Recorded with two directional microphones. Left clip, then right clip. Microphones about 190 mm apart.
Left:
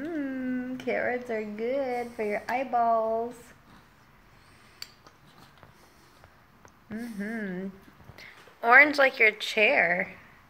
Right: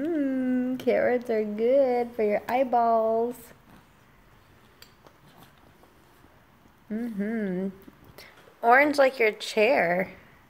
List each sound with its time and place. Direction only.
0.0 s speech: 60° right (ahead or behind)
7.0 s speech: 55° right (ahead or behind)
8.2 s a sound: 50° right (ahead or behind)
8.5 s speech: 35° right (ahead or behind)